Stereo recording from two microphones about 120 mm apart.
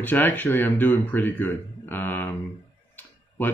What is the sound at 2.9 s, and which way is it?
Tick-tock, 15° left (ahead or behind).